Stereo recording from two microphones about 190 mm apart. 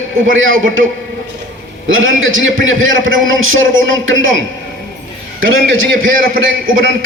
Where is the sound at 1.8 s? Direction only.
90° right.